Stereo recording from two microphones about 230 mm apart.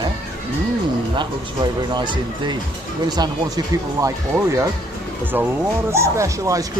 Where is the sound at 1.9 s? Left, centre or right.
Centre.